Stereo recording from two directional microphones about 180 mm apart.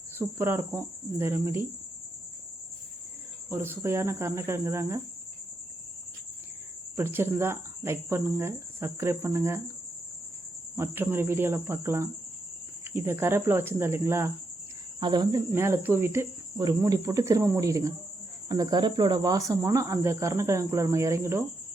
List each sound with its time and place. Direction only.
0.2 s speech: 15° right (ahead or behind)
3.5 s speech: 15° right (ahead or behind)
6.9 s speech: 10° right (ahead or behind)
10.8 s speech: 15° right (ahead or behind)